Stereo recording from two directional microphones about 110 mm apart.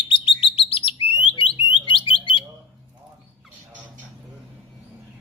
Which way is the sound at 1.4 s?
50° left (ahead or behind).